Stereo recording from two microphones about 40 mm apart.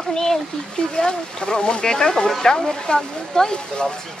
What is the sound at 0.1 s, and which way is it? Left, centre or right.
Speech, centre.